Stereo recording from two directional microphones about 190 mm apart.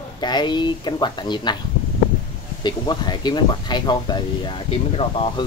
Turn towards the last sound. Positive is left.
turn(degrees=25)  # may be behind; listen again after turning